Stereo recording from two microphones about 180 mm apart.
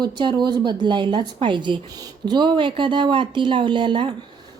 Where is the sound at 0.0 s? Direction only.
25° right (ahead or behind).